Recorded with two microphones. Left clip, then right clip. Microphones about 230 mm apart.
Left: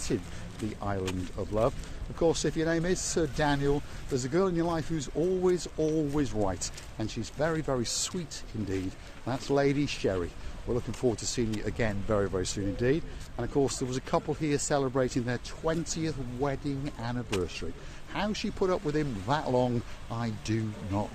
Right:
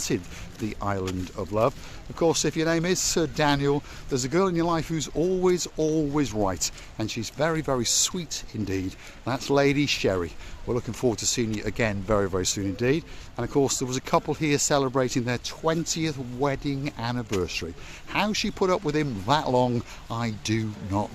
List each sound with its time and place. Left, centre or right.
0.8 s speech: right